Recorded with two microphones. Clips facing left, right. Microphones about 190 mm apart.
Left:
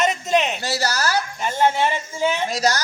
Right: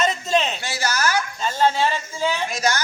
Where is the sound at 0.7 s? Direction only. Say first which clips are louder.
Right 1 dB; 35° left (ahead or behind).